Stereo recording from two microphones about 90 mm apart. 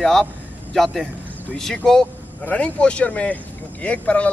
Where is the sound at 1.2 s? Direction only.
20° right (ahead or behind).